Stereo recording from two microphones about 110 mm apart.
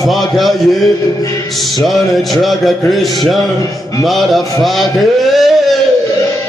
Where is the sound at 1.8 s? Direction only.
Centre (ahead or behind).